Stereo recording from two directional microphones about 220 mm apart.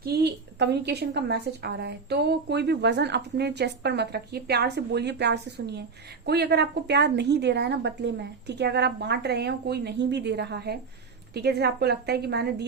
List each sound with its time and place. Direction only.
0.0 s a woman's voice: 50° right (ahead or behind)